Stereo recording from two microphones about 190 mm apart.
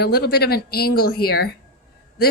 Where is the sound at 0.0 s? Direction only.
55° left (ahead or behind).